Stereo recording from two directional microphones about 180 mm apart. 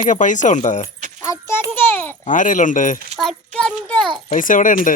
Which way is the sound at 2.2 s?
45° left (ahead or behind).